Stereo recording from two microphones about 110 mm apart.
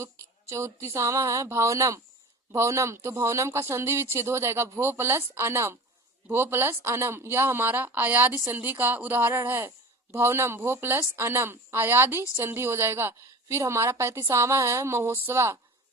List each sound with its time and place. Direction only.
0.0 s speech: 25° right (ahead or behind)